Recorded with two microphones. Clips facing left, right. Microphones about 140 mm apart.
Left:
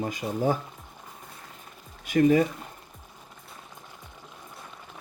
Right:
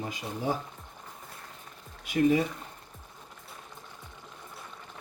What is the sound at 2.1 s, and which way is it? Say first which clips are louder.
Speech: left 4 dB; 50° left (ahead or behind).